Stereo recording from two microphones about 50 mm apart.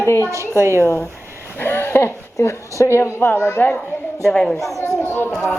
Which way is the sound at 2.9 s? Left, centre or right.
Left.